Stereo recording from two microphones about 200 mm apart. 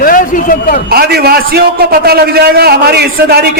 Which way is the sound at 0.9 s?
50° right (ahead or behind).